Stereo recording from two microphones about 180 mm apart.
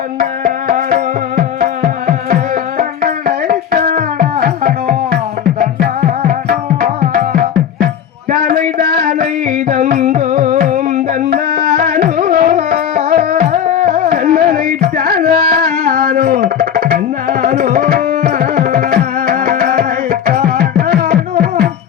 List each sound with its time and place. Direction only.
0.2 s music: 50° right (ahead or behind)
3.8 s music: 40° right (ahead or behind)
4.4 s music: 60° right (ahead or behind)
9.6 s music: 40° right (ahead or behind); by 21.2 s 55° right (ahead or behind)